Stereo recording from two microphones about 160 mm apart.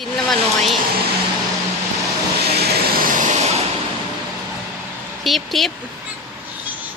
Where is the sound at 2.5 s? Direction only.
75° right (ahead or behind); by 3.6 s 45° right (ahead or behind).